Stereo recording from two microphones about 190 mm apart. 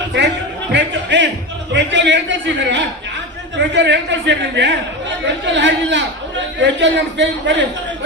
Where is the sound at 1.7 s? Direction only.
70° right (ahead or behind).